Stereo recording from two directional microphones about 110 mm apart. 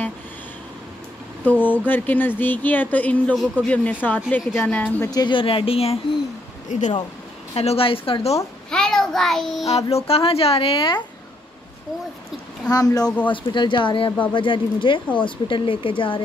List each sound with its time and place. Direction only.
1.4 s speech: 15° left (ahead or behind)
5.0 s speech: 35° left (ahead or behind)
5.3 s speech: 50° left (ahead or behind)
6.7 s speech: 90° left
7.5 s a woman's voice: 65° left (ahead or behind)
8.6 s child singing: 5° left (ahead or behind)
9.7 s a woman's voice: 70° left (ahead or behind); by 11.0 s 50° left (ahead or behind)
12.7 s speech: 35° left (ahead or behind)
13.0 s speech: 10° left (ahead or behind)
13.3 s speech: 45° left (ahead or behind)